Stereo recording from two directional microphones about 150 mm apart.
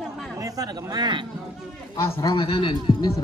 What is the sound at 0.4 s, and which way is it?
Speech, 25° right (ahead or behind).